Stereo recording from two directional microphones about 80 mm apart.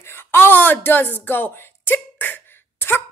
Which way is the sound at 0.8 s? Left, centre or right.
Left.